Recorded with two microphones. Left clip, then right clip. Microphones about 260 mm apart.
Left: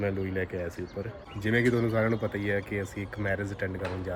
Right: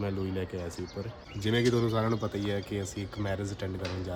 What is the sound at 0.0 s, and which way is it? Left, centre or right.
Speech, centre.